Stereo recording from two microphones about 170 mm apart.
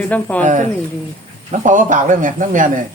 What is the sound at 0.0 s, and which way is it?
Speech, 10° left (ahead or behind).